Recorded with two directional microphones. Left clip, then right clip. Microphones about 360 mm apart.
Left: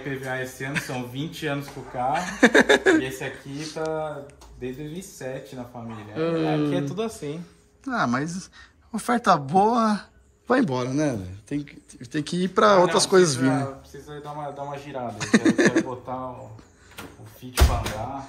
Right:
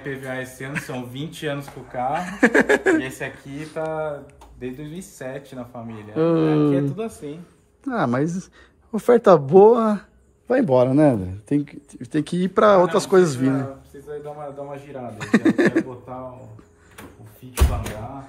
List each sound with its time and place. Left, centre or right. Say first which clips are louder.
0.0 s speech: even; centre
5.2 s speech: right 2 dB; centre
7.0 s speech: left 1 dB; left
7.8 s speech: right 3 dB; centre
15.1 s speech: right 2 dB; centre